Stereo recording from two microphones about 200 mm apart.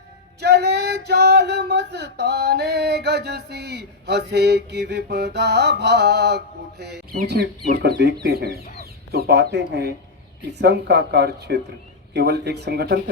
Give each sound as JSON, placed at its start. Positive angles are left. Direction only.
{"t": 0.3, "sound": "a sound", "side_deg": -55}
{"t": 7.3, "sound": "speech", "side_deg": -55}
{"t": 8.8, "sound": "chicken", "side_deg": -50}
{"t": 10.5, "sound": "speech", "side_deg": -55}